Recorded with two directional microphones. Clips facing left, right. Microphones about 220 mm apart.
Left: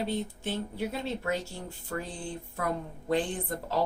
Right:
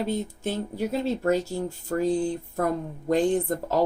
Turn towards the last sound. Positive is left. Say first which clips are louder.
# right 8 dB
turn(degrees=-40)  # may be behind; listen again after turning